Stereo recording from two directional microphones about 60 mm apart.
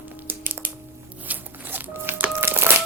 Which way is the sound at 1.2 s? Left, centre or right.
Right.